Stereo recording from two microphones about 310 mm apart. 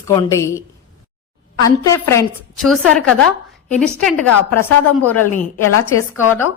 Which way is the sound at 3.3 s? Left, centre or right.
Centre.